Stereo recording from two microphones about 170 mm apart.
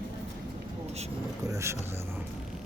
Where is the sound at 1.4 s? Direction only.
15° right (ahead or behind).